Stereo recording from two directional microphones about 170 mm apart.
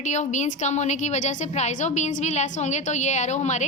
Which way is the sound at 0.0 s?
45° left (ahead or behind).